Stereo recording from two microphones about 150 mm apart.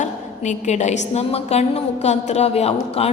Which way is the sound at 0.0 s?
55° left (ahead or behind).